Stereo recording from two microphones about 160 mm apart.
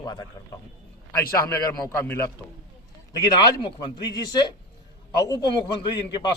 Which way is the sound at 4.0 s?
25° left (ahead or behind).